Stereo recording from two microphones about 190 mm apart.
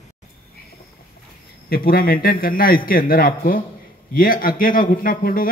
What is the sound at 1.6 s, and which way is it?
A man's voice, 50° left (ahead or behind).